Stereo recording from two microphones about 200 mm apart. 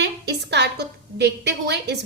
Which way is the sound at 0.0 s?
55° right (ahead or behind).